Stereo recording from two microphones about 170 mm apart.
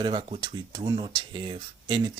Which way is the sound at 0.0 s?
30° right (ahead or behind).